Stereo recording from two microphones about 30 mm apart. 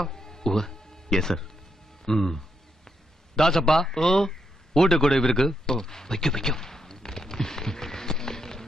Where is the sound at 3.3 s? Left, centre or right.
Centre.